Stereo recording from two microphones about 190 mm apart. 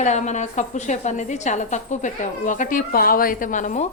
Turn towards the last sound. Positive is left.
turn(degrees=40)  # may be behind; listen again after turning